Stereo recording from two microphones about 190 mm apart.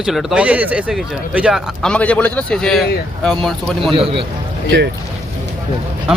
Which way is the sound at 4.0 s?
30° right (ahead or behind).